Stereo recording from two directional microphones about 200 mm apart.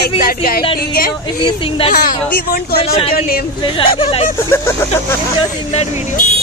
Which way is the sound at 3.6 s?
25° left (ahead or behind).